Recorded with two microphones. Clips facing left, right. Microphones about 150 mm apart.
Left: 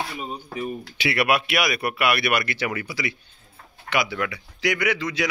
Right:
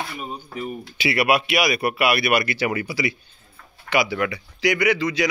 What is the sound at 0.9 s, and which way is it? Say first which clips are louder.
A man's voice: right 2 dB; centre (ahead or behind).